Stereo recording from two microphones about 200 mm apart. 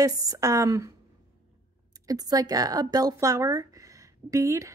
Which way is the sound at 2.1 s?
20° right (ahead or behind).